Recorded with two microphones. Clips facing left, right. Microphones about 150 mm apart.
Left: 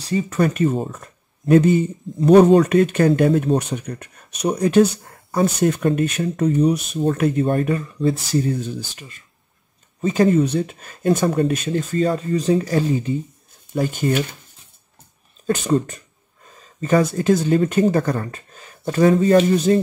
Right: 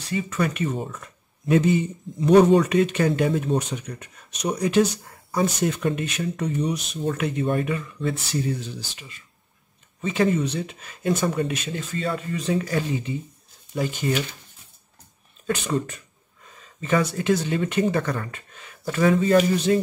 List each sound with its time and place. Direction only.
0.0 s speech: 40° left (ahead or behind)
1.4 s speech: 50° left (ahead or behind)
13.7 s speech: 50° left (ahead or behind)
15.4 s speech: 40° left (ahead or behind)